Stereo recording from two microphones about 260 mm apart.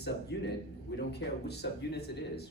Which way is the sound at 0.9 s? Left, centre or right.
Left.